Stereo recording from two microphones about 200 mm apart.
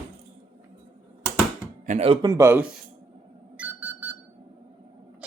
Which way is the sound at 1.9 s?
30° right (ahead or behind).